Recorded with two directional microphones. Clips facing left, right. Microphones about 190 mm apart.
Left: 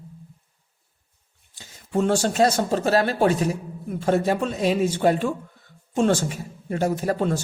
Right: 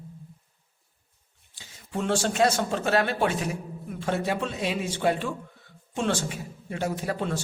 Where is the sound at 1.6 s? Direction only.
40° left (ahead or behind).